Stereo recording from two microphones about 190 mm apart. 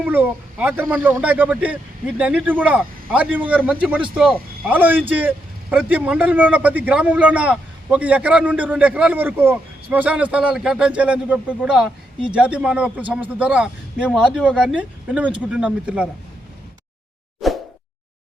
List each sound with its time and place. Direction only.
0.0 s a man's voice: 10° right (ahead or behind)
17.4 s plop: centre (ahead or behind)